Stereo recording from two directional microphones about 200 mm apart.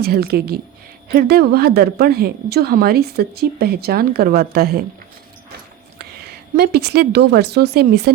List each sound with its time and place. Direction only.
0.0 s a woman's voice: 50° right (ahead or behind)
6.6 s speech: 55° right (ahead or behind)